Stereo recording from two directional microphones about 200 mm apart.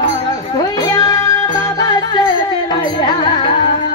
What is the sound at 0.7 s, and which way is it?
Music, 20° left (ahead or behind).